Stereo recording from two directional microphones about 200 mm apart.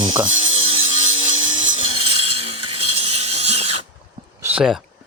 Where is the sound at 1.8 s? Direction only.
25° right (ahead or behind).